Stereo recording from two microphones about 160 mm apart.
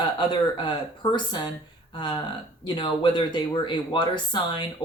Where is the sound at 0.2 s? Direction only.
30° left (ahead or behind).